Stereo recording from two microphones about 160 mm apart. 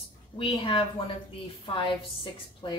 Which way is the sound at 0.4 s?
35° left (ahead or behind).